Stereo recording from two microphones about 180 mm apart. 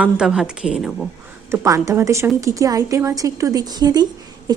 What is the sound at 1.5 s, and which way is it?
A woman's voice, 15° right (ahead or behind).